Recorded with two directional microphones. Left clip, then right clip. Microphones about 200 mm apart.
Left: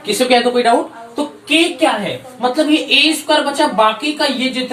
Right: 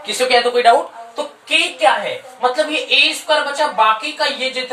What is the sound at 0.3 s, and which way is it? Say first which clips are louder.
Speech: even; 20° right (ahead or behind).